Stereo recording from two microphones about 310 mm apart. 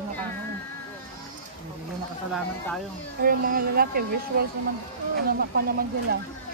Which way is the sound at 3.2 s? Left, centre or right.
Right.